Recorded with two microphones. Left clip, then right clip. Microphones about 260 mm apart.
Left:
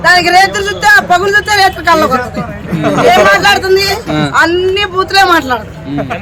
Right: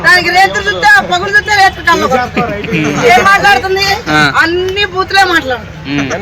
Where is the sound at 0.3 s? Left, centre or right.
Left.